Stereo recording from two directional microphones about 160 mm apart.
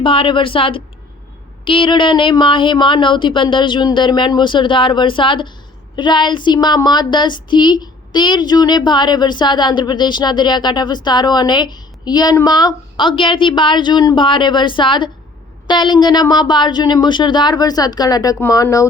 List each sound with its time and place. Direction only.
0.0 s speech: 35° left (ahead or behind)